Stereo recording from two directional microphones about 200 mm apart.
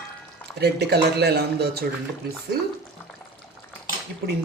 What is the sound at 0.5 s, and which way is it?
Speech, 55° right (ahead or behind).